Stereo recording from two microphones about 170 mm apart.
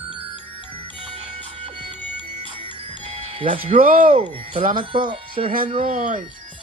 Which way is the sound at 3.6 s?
55° right (ahead or behind).